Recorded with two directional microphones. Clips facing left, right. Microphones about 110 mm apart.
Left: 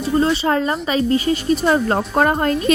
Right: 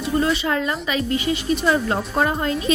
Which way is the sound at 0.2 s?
30° left (ahead or behind).